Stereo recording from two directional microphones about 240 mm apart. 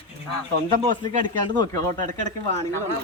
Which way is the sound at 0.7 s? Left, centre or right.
Right.